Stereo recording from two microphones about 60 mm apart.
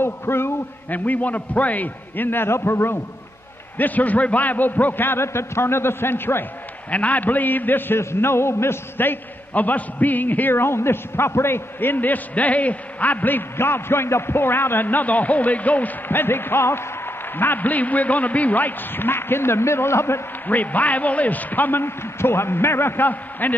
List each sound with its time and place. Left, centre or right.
0.0 s a man's voice: left
0.8 s a man's voice: left
3.7 s a man's voice: left
6.9 s a man's voice: left
8.0 s a man's voice: left
20.4 s a man's voice: left